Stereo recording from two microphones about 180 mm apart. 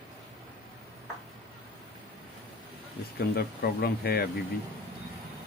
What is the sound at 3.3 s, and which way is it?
Speech, 60° left (ahead or behind).